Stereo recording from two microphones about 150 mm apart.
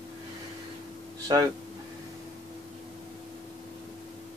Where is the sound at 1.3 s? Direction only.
30° right (ahead or behind).